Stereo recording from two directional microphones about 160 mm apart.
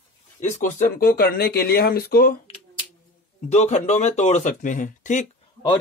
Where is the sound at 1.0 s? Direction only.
70° left (ahead or behind).